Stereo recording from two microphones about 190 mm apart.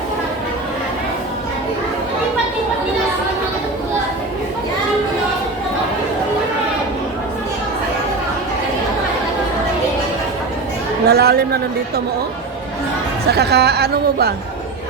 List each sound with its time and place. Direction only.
11.0 s speech: 55° right (ahead or behind)
13.3 s speech: 60° right (ahead or behind)